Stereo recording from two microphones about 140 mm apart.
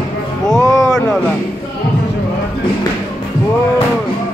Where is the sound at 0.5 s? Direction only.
20° left (ahead or behind).